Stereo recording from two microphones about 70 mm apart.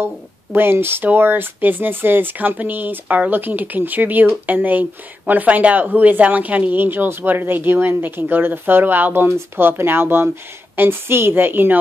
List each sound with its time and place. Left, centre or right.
0.0 s a woman's voice: right